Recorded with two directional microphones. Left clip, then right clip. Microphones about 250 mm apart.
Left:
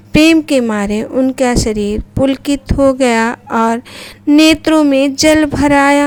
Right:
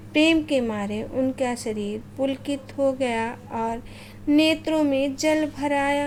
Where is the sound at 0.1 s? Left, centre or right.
Left.